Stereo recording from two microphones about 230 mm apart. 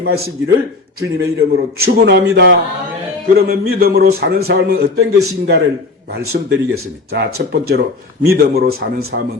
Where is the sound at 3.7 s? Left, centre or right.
Right.